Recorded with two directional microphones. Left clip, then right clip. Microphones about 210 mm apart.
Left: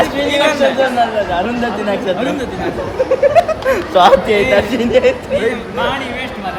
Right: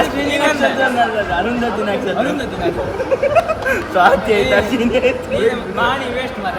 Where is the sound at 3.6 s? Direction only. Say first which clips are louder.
Left 3 dB; 45° left (ahead or behind).